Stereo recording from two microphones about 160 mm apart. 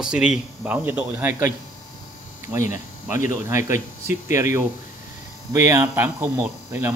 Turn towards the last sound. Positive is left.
turn(degrees=-15)  # may be behind; listen again after turning